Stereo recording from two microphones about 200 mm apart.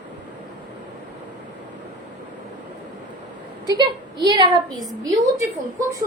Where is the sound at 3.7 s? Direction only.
20° right (ahead or behind).